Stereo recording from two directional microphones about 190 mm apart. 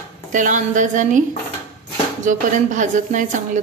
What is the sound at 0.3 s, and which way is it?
Speech, 40° right (ahead or behind).